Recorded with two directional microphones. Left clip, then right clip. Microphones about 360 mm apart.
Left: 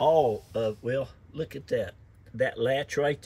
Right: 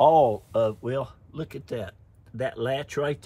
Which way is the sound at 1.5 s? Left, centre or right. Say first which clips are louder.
Left 5 dB; centre.